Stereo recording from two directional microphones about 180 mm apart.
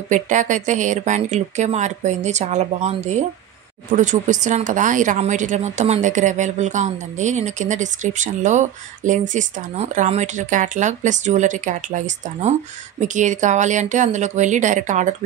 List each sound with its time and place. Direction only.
0.1 s speech: 45° right (ahead or behind)